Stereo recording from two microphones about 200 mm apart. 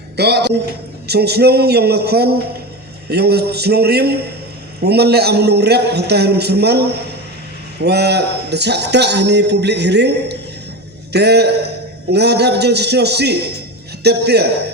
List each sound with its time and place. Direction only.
0.2 s a man's voice: 55° right (ahead or behind)